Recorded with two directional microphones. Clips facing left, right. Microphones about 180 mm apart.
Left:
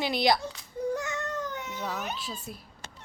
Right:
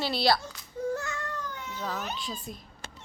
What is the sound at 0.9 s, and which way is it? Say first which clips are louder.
Baby cry: left 2 dB; 20° left (ahead or behind).